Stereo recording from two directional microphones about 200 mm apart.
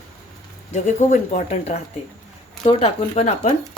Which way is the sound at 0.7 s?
35° left (ahead or behind).